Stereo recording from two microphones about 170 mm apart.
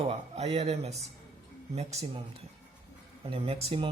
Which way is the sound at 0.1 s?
35° right (ahead or behind).